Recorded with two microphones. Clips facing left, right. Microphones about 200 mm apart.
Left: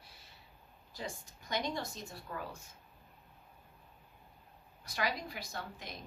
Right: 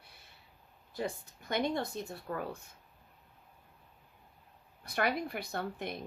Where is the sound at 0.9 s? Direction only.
60° right (ahead or behind).